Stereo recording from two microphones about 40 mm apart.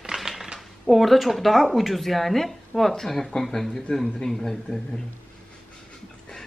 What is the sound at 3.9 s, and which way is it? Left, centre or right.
Speech, left.